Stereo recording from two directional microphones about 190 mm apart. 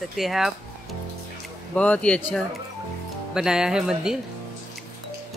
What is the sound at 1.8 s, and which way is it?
Speech, 5° left (ahead or behind).